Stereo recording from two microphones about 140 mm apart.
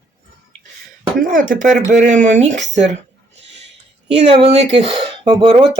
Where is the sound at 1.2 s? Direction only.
75° right (ahead or behind).